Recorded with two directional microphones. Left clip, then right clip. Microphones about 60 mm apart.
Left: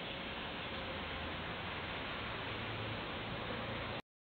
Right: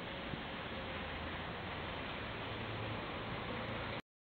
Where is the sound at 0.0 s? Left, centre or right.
Left.